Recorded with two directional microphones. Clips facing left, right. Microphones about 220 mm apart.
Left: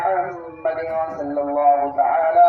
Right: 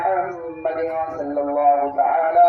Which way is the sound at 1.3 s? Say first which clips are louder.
Even; centre (ahead or behind).